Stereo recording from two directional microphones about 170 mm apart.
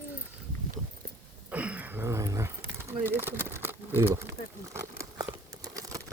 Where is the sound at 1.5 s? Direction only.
10° right (ahead or behind).